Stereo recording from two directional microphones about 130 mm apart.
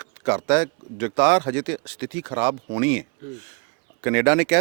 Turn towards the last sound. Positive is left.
turn(degrees=-20)  # may be behind; listen again after turning